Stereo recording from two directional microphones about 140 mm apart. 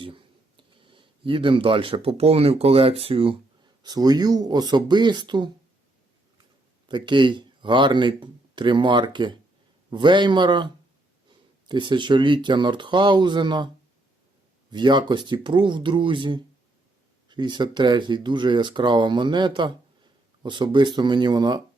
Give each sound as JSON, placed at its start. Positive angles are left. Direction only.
{"t": 0.0, "sound": "speech", "side_deg": -40}
{"t": 3.8, "sound": "speech", "side_deg": -30}
{"t": 6.8, "sound": "speech", "side_deg": -35}
{"t": 11.7, "sound": "speech", "side_deg": -35}
{"t": 14.7, "sound": "speech", "side_deg": -35}